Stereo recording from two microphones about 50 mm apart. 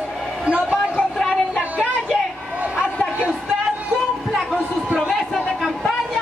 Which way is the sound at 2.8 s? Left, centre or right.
Left.